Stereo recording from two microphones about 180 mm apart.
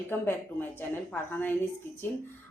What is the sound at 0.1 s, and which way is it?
A woman's voice, 10° left (ahead or behind).